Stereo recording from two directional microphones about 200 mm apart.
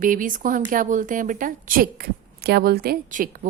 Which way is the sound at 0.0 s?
40° right (ahead or behind).